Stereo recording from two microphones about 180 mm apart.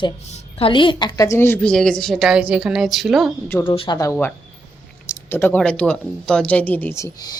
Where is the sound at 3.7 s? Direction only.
30° left (ahead or behind).